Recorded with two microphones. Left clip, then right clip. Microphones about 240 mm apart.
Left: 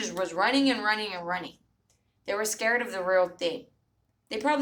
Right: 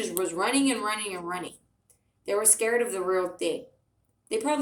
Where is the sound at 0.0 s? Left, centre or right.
Left.